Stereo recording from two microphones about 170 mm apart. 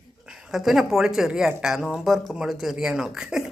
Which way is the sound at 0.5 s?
Centre (ahead or behind).